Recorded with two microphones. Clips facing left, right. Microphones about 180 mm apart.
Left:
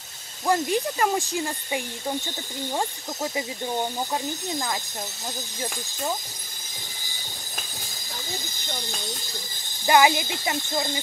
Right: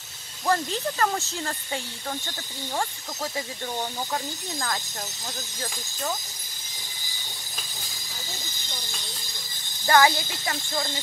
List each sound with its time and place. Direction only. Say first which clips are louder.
0.5 s speech: left 2 dB; 15° left (ahead or behind)
9.8 s speech: left 1 dB; 15° left (ahead or behind)